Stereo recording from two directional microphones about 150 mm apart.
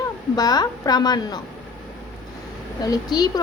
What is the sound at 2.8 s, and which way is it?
Speech, 25° left (ahead or behind).